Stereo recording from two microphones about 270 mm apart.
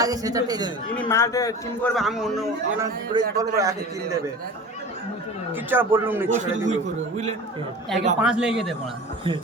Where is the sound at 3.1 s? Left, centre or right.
Centre.